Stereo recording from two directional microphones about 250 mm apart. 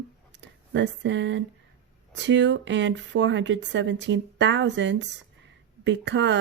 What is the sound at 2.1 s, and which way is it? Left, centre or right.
A woman's voice, right.